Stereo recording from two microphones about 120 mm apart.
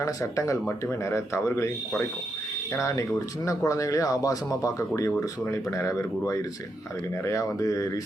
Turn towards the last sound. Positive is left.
turn(degrees=30)  # may be behind; listen again after turning